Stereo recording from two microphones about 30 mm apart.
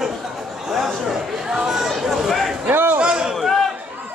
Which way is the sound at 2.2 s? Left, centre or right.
Centre.